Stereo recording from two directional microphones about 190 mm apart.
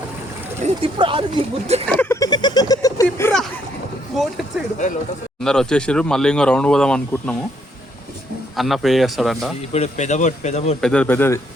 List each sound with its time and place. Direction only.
0.6 s speech: 25° right (ahead or behind)
1.9 s a sound: 10° left (ahead or behind)
4.1 s speech: centre (ahead or behind)
8.5 s speech: centre (ahead or behind)
9.7 s speech: 35° left (ahead or behind)
10.8 s speech: 5° left (ahead or behind)